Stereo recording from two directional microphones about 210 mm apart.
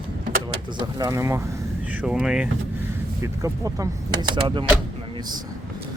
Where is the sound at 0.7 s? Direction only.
20° right (ahead or behind); by 2.4 s 5° right (ahead or behind).